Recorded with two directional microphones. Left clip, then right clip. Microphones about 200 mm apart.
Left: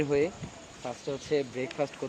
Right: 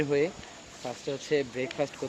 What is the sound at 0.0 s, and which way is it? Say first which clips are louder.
Speech: even; 5° left (ahead or behind).